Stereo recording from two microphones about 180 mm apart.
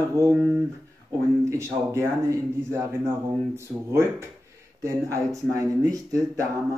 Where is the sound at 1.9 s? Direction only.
15° right (ahead or behind).